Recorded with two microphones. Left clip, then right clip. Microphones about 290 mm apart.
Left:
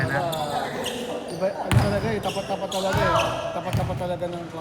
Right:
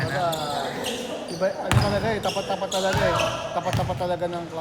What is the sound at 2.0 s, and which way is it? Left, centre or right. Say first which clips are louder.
Speech: right 2 dB; right.